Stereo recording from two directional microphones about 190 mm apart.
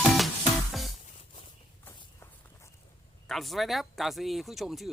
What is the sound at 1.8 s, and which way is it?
Walk, 15° left (ahead or behind).